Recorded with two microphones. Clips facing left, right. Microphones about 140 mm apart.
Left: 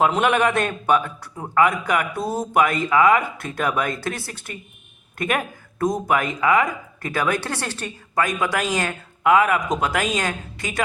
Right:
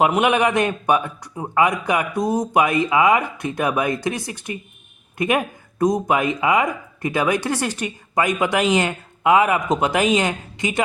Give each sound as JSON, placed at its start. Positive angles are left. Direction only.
{"t": 0.0, "sound": "a man's voice", "side_deg": -15}